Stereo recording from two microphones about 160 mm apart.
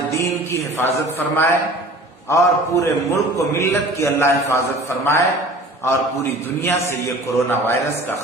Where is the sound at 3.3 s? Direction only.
20° left (ahead or behind).